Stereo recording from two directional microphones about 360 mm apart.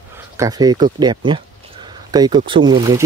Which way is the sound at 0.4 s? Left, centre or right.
Centre.